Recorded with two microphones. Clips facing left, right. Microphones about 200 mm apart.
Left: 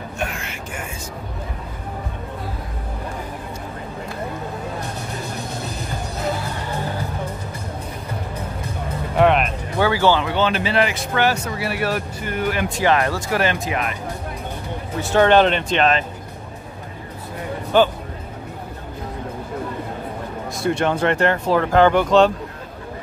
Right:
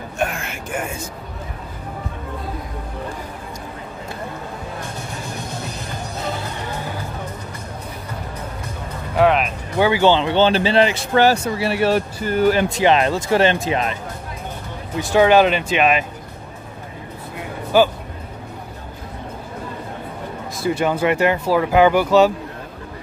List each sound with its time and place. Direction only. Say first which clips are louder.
0.2 s a sound: right 5 dB; 50° right (ahead or behind)
9.1 s music: even; centre (ahead or behind)
9.8 s speech: right 2 dB; 20° right (ahead or behind); by 12.6 s 35° right (ahead or behind)
12.7 s speech: right 3 dB; 20° right (ahead or behind)
15.0 s speech: right 1 dB; 10° right (ahead or behind)
17.7 s speech: right 1 dB; 5° right (ahead or behind)
20.6 s speech: right 1 dB; 5° right (ahead or behind)